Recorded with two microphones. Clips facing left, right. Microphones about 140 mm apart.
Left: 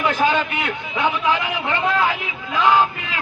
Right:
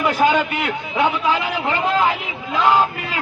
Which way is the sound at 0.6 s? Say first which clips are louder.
Right 3 dB; 35° right (ahead or behind).